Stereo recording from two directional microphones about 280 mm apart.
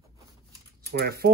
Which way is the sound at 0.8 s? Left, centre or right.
Right.